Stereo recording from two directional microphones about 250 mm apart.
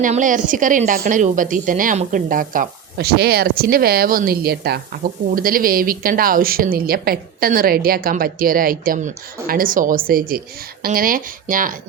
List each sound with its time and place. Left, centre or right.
0.0 s a woman's voice: right